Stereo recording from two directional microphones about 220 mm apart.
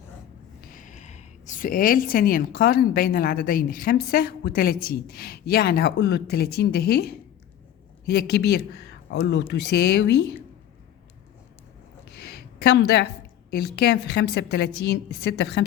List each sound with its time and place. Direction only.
0.7 s a woman's voice: 35° left (ahead or behind)
12.1 s a sound: 45° left (ahead or behind)
13.7 s a woman's voice: 45° left (ahead or behind)